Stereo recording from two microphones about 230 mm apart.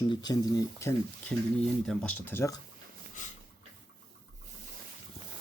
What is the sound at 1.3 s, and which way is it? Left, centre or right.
Speech, centre.